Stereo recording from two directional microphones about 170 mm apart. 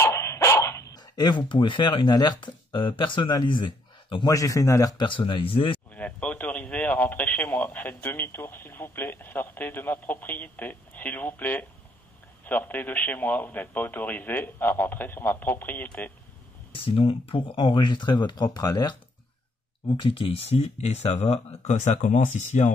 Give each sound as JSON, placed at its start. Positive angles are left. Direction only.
{"t": 0.0, "sound": "dog", "side_deg": 15}
{"t": 3.0, "sound": "a man's voice", "side_deg": 30}
{"t": 5.9, "sound": "speech", "side_deg": 10}
{"t": 16.7, "sound": "a man's voice", "side_deg": 30}
{"t": 20.0, "sound": "speech", "side_deg": 30}